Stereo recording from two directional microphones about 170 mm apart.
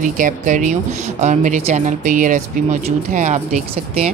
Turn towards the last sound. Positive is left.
turn(degrees=-45)  # may be behind; listen again after turning